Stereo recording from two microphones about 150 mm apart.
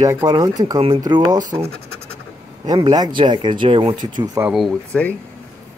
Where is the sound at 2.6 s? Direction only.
25° right (ahead or behind).